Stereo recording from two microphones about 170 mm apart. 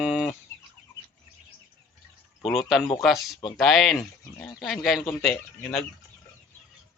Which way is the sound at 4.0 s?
15° left (ahead or behind).